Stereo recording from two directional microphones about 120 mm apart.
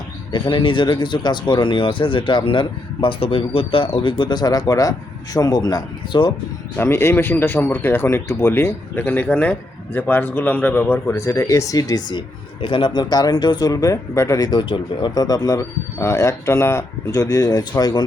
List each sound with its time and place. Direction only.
0.3 s speech: 40° left (ahead or behind)
6.7 s speech: 20° left (ahead or behind); by 18.0 s 35° left (ahead or behind)